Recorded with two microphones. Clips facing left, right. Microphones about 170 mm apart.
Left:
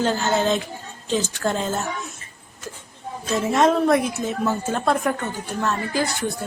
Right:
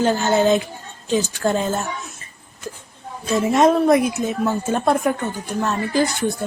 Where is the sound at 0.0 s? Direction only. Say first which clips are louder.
Right 4 dB; 15° right (ahead or behind).